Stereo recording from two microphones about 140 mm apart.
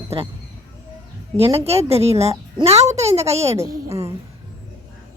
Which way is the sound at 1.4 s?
45° right (ahead or behind).